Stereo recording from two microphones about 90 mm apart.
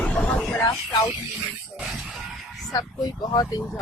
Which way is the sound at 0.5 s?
35° left (ahead or behind).